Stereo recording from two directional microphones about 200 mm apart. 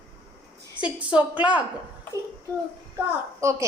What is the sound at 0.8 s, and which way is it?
Speech, 5° right (ahead or behind).